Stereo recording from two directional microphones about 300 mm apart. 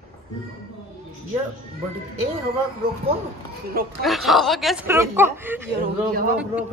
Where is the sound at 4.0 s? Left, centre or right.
Centre.